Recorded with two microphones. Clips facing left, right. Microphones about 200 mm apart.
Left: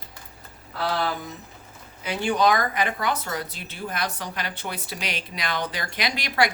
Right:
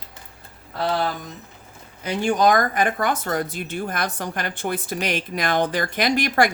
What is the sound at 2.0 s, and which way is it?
Speech, 45° right (ahead or behind).